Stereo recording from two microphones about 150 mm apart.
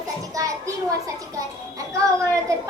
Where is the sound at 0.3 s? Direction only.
20° right (ahead or behind).